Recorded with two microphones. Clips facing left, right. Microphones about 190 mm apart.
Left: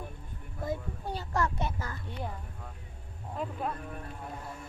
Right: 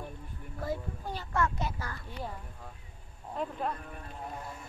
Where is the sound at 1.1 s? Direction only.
35° left (ahead or behind).